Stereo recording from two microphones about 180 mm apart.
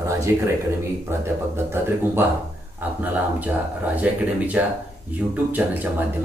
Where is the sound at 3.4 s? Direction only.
10° right (ahead or behind).